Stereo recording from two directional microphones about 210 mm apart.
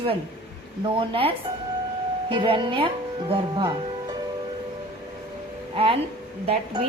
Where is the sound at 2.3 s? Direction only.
25° right (ahead or behind).